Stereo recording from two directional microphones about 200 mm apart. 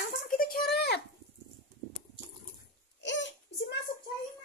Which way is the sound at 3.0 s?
65° left (ahead or behind).